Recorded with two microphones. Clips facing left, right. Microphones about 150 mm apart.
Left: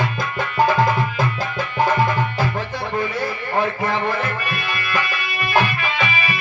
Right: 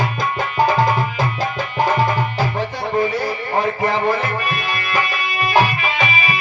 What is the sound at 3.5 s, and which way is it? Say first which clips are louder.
Speech: right 2 dB; 20° right (ahead or behind).